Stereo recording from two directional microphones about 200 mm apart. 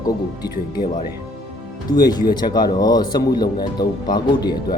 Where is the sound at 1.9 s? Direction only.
20° left (ahead or behind).